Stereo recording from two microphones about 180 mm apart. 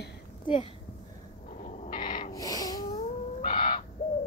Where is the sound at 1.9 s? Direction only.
45° left (ahead or behind).